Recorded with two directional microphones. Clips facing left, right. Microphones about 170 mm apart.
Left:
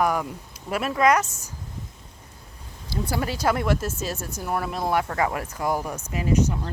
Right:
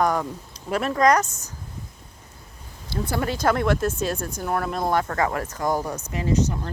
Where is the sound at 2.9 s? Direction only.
10° left (ahead or behind).